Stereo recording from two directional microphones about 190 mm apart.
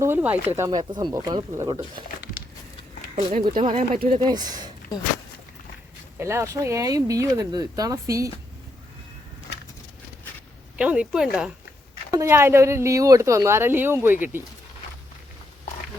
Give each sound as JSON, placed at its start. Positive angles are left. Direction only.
{"t": 0.0, "sound": "speech", "side_deg": -10}
{"t": 3.2, "sound": "speech", "side_deg": -40}
{"t": 4.0, "sound": "speech", "side_deg": -25}
{"t": 6.1, "sound": "speech", "side_deg": -15}
{"t": 10.8, "sound": "a woman's voice", "side_deg": -5}